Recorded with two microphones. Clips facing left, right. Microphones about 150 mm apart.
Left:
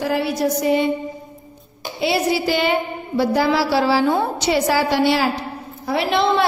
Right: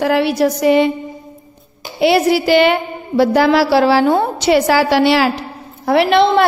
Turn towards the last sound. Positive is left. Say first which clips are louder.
# right 6 dB
turn(degrees=-70)  # may be behind; listen again after turning